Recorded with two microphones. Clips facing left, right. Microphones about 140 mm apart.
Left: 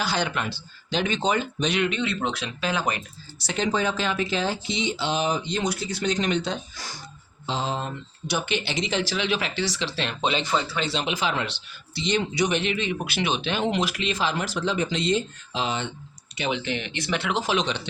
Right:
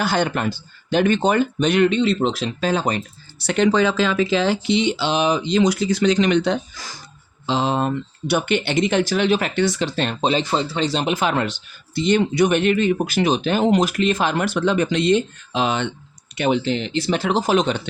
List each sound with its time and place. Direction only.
0.0 s speech: 55° right (ahead or behind)
1.9 s speech: 30° right (ahead or behind)
3.4 s speech: 65° right (ahead or behind); by 7.0 s 90° right
7.4 s speech: 80° right
16.5 s speech: 35° right (ahead or behind)